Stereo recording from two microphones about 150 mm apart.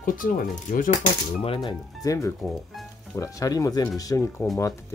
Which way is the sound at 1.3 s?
40° left (ahead or behind).